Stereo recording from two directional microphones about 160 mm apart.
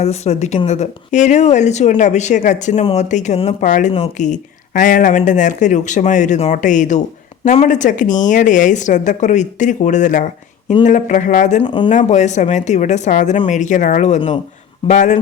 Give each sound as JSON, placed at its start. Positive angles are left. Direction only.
{"t": 0.0, "sound": "speech", "side_deg": 45}
{"t": 11.6, "sound": "speech", "side_deg": 30}
{"t": 11.9, "sound": "speech", "side_deg": 50}